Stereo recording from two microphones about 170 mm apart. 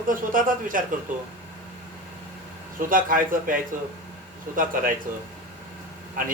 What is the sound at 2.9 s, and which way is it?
A man's voice, 55° right (ahead or behind).